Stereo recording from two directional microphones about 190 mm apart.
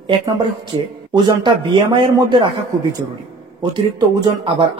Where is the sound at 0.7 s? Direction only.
25° right (ahead or behind).